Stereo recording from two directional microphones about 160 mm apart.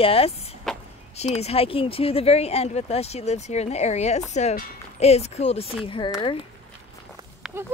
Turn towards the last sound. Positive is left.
turn(degrees=-5)  # may be behind; listen again after turning